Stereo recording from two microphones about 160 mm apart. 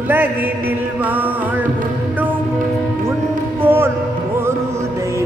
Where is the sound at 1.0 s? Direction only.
10° right (ahead or behind).